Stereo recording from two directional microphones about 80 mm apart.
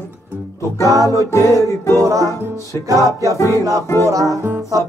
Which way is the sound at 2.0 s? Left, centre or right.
Right.